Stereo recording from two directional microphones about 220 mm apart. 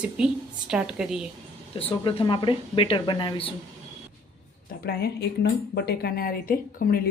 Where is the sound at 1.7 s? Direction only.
25° left (ahead or behind).